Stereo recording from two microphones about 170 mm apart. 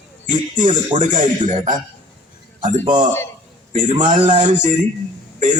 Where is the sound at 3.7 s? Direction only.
50° right (ahead or behind).